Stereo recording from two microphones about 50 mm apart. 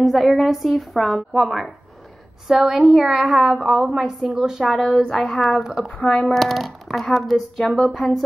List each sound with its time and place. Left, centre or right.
0.0 s speech: centre
2.7 s a woman's voice: centre
4.6 s speech: centre
6.0 s speech: centre
6.3 s speech: centre